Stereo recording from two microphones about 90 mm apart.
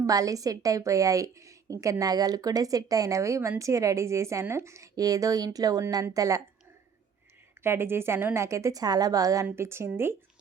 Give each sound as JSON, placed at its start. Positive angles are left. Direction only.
{"t": 0.0, "sound": "a woman's voice", "side_deg": -40}
{"t": 7.6, "sound": "a woman's voice", "side_deg": -25}